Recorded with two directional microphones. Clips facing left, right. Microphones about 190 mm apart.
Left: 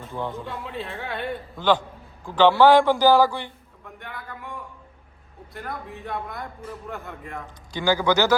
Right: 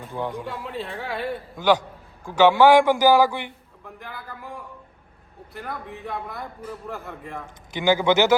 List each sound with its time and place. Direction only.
0.1 s a man's voice: 15° right (ahead or behind)
0.4 s a man's voice: centre (ahead or behind); by 3.5 s 20° right (ahead or behind)
5.5 s a man's voice: centre (ahead or behind)
7.7 s a man's voice: 20° right (ahead or behind)